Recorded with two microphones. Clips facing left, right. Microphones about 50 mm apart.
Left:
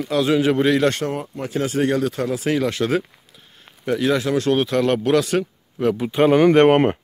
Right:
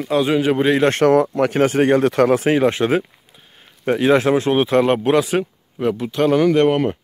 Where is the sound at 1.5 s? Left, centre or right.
Right.